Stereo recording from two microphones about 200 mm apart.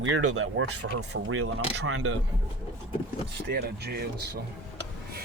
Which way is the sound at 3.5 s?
50° right (ahead or behind).